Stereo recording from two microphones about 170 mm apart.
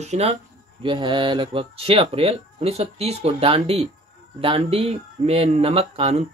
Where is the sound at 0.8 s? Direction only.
30° right (ahead or behind).